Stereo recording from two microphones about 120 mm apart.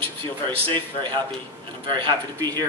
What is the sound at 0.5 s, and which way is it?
A man's voice, 45° right (ahead or behind).